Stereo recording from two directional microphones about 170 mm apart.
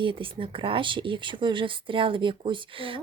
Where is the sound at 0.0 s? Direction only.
30° right (ahead or behind).